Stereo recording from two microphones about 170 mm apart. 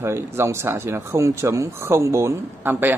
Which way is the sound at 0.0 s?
15° right (ahead or behind).